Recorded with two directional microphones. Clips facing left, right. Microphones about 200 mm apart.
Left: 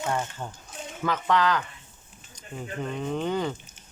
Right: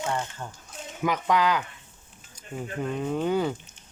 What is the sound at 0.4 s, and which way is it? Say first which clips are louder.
Speech: left 2 dB; 20° left (ahead or behind).